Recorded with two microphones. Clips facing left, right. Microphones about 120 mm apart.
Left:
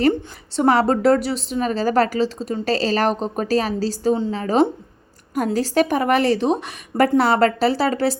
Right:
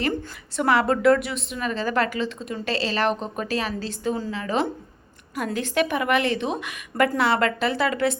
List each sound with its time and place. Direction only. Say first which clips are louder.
0.5 s a woman's voice: left 4 dB; 35° left (ahead or behind)